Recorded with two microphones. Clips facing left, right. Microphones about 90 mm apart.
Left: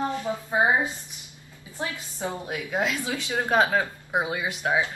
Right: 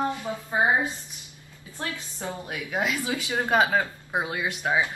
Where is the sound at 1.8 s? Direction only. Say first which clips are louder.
Left 2 dB; 15° left (ahead or behind).